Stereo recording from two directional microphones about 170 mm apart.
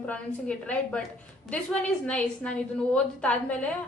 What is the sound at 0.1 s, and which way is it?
A woman's voice, 10° left (ahead or behind).